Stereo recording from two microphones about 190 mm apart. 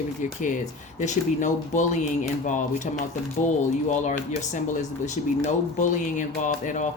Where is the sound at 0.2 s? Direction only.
40° left (ahead or behind).